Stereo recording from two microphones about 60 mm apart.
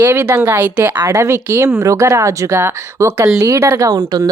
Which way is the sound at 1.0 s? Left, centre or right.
Right.